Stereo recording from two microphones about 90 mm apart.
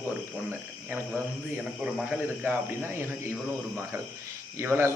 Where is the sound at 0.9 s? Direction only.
20° right (ahead or behind).